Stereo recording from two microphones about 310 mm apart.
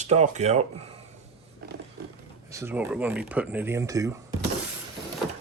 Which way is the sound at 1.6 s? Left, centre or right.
Right.